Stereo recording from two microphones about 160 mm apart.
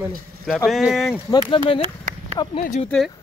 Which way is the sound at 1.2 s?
30° left (ahead or behind).